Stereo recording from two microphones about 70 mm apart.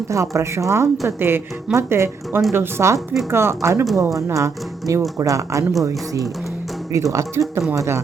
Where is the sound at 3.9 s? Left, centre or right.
Right.